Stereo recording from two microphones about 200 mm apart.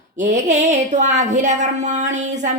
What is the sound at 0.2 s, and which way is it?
Speech, 35° right (ahead or behind).